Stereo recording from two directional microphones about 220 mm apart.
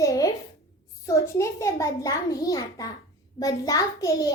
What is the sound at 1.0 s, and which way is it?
A child's voice, 15° left (ahead or behind).